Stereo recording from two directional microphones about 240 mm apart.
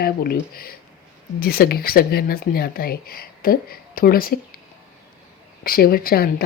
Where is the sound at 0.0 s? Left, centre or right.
Left.